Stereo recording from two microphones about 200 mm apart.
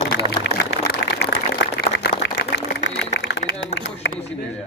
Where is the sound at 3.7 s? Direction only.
60° left (ahead or behind).